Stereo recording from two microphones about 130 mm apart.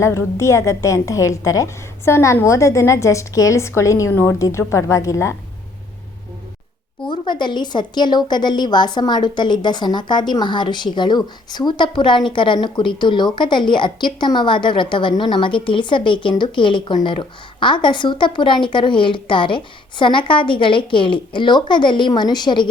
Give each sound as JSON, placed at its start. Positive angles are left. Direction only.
{"t": 0.0, "sound": "a woman's voice", "side_deg": 20}
{"t": 7.1, "sound": "a woman's voice", "side_deg": 35}